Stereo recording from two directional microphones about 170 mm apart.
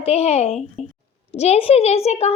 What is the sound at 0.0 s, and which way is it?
A child's voice, 35° left (ahead or behind).